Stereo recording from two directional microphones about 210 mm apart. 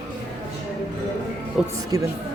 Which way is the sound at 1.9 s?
15° right (ahead or behind).